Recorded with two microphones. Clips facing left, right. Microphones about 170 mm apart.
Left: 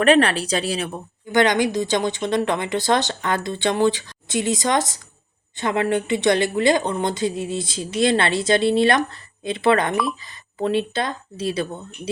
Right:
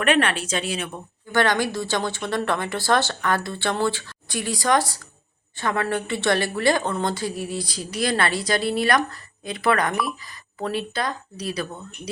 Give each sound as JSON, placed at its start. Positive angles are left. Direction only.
{"t": 0.0, "sound": "speech", "side_deg": 35}
{"t": 1.3, "sound": "a woman's voice", "side_deg": 20}